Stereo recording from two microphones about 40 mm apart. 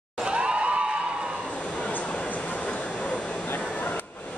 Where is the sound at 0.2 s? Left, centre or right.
Right.